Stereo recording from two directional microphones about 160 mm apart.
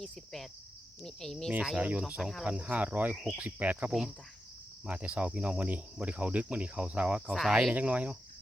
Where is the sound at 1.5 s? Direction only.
5° right (ahead or behind).